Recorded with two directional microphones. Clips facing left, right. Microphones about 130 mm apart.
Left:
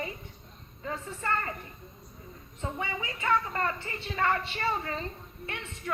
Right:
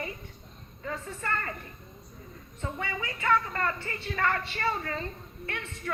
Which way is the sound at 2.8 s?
25° left (ahead or behind).